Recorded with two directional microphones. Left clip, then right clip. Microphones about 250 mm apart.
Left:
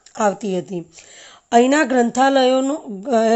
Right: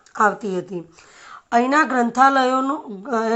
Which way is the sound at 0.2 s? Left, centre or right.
Left.